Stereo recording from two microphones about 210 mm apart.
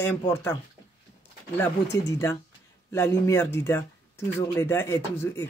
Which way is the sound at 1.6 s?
10° left (ahead or behind).